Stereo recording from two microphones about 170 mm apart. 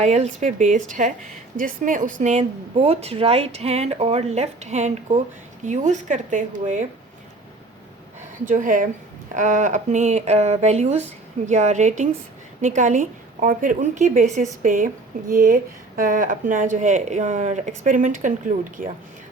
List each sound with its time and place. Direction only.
0.0 s a woman's voice: 40° right (ahead or behind)
8.4 s speech: 50° right (ahead or behind)